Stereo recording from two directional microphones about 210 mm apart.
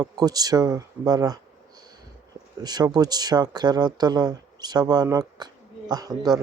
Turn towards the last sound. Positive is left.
turn(degrees=-20)  # may be behind; listen again after turning